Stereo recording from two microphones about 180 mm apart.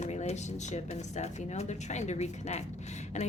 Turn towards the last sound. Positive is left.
turn(degrees=40)  # may be behind; listen again after turning